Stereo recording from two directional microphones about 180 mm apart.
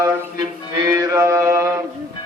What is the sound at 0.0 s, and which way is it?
Mantra, 20° right (ahead or behind).